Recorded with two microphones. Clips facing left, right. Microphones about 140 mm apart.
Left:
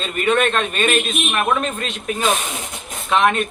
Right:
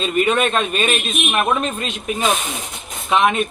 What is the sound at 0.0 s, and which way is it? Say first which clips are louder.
Speech: right 1 dB; 10° right (ahead or behind).